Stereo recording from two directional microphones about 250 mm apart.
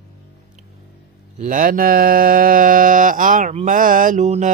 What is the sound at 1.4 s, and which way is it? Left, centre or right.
Mantra, right.